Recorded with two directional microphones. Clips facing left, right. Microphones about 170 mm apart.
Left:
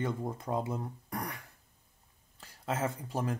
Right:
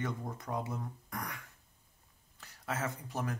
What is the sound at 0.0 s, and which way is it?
Speech, 25° left (ahead or behind).